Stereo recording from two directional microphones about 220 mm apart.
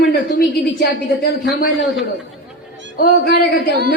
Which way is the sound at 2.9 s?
45° left (ahead or behind).